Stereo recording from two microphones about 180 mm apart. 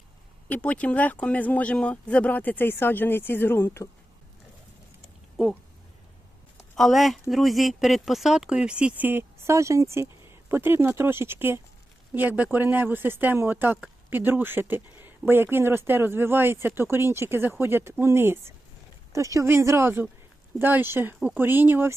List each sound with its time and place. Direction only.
0.4 s speech: 10° left (ahead or behind)
6.7 s speech: centre (ahead or behind)